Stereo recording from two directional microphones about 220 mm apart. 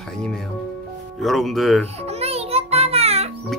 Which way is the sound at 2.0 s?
30° right (ahead or behind).